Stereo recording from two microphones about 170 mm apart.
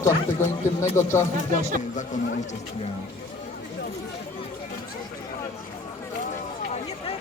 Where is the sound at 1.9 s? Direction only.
45° left (ahead or behind).